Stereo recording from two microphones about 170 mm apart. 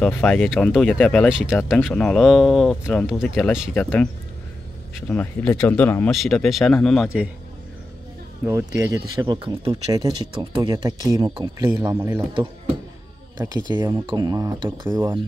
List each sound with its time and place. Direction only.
0.0 s speech: 5° left (ahead or behind)
8.5 s speech: 20° right (ahead or behind)
13.7 s speech: 25° right (ahead or behind)